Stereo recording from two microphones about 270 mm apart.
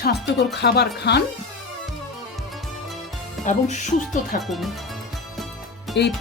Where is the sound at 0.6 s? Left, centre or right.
Left.